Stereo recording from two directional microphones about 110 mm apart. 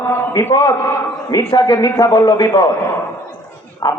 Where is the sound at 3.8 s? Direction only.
35° left (ahead or behind).